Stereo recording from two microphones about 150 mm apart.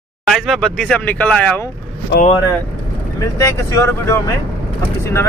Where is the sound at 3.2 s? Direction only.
20° left (ahead or behind).